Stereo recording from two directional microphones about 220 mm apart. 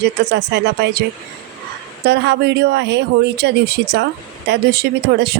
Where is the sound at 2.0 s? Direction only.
50° right (ahead or behind).